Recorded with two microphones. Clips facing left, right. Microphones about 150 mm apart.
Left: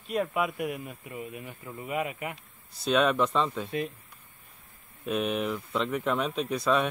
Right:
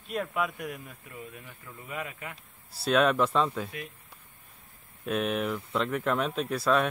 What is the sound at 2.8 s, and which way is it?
Speech, centre (ahead or behind).